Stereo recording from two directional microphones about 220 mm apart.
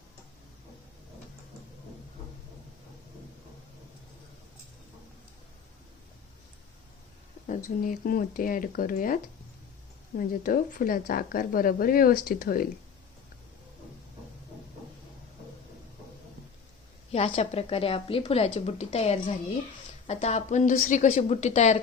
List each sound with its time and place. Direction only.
7.4 s a woman's voice: 35° left (ahead or behind)
10.2 s a woman's voice: 40° left (ahead or behind)
17.1 s a woman's voice: 30° left (ahead or behind)